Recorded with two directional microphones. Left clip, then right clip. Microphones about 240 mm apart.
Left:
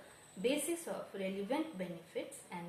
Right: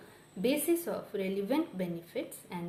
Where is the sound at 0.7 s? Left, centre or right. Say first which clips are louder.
Right 9 dB; right.